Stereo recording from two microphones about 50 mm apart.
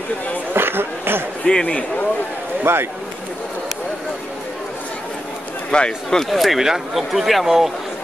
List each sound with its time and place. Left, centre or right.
0.5 s a sound: right
1.4 s speech: centre
2.6 s speech: right
5.7 s speech: centre
6.0 s speech: centre